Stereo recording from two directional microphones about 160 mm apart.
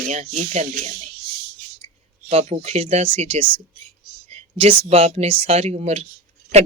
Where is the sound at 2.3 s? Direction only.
40° right (ahead or behind).